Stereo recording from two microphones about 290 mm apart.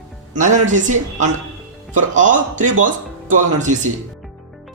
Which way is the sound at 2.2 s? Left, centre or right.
Right.